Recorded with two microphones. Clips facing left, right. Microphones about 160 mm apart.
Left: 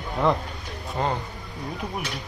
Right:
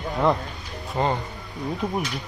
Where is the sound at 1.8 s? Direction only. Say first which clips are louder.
Right 7 dB; 25° right (ahead or behind).